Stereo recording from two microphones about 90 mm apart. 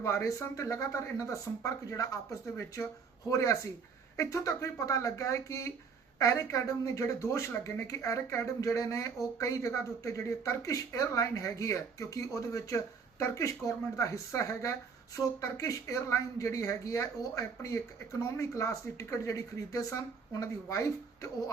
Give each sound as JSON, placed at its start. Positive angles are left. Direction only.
{"t": 0.0, "sound": "speech", "side_deg": 35}